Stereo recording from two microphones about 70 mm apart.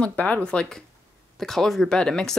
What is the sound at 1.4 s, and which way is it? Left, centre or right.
Speech, centre.